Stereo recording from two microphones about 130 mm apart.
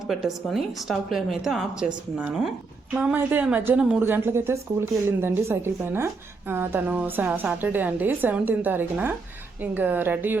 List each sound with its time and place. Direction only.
0.1 s a woman's voice: centre (ahead or behind)